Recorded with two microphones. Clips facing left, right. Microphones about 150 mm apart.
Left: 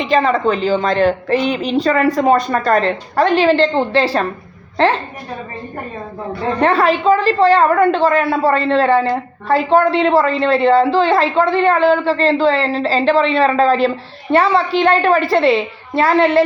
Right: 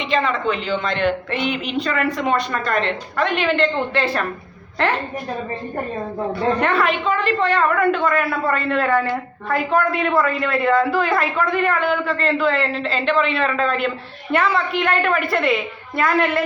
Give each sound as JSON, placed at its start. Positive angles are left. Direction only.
{"t": 0.0, "sound": "a woman's voice", "side_deg": 40}
{"t": 6.6, "sound": "a woman's voice", "side_deg": 35}